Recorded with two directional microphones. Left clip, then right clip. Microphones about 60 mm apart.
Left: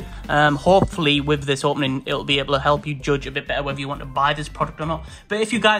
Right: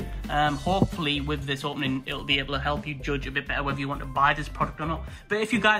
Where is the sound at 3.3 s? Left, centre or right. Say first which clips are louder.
Left 4 dB; left.